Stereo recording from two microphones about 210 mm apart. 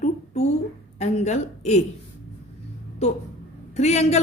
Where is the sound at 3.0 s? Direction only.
30° left (ahead or behind).